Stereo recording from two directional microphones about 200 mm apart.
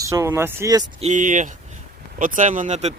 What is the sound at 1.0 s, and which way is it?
Speech, 35° right (ahead or behind).